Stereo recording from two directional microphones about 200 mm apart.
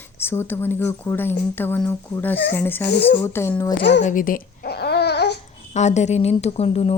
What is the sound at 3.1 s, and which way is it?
Speech, 10° left (ahead or behind).